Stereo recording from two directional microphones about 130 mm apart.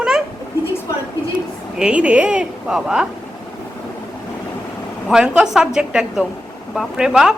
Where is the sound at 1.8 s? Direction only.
10° right (ahead or behind).